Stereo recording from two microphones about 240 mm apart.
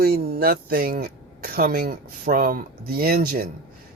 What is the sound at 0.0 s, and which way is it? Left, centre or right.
Speech, right.